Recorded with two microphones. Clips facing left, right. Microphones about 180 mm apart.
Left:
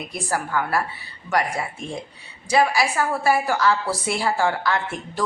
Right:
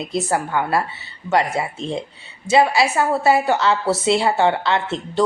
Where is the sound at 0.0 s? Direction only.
25° right (ahead or behind).